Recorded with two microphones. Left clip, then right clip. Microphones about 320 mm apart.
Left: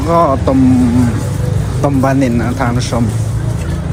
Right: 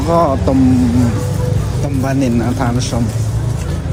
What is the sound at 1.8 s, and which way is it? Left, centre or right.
Speech, centre.